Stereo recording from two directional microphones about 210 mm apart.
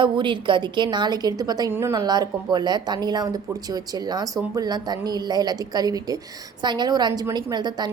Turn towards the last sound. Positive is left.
turn(degrees=-20)  # may be behind; listen again after turning